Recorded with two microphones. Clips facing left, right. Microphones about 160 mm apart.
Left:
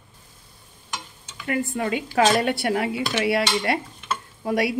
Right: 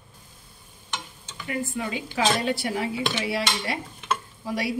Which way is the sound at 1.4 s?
60° left (ahead or behind).